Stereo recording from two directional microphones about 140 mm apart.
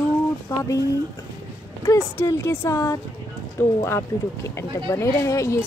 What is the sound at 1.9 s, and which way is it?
Speech, 20° left (ahead or behind).